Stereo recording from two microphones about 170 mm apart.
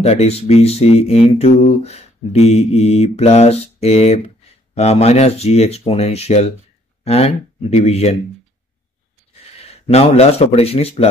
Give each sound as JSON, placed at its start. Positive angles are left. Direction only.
{"t": 0.0, "sound": "speech", "side_deg": 40}
{"t": 9.6, "sound": "a man's voice", "side_deg": 40}